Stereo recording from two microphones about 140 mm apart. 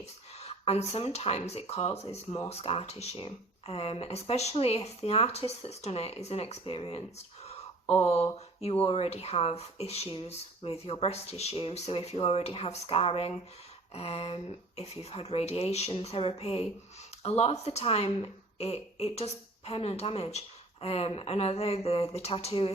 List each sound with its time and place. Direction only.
0.3 s speech: 50° left (ahead or behind)
8.0 s speech: 50° left (ahead or behind)